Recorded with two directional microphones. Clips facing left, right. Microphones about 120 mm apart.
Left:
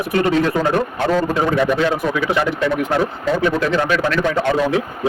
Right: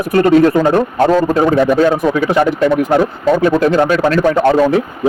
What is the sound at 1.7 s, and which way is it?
A man's voice, 45° right (ahead or behind).